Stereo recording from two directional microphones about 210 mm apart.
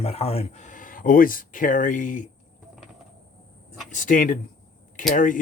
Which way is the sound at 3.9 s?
40° left (ahead or behind).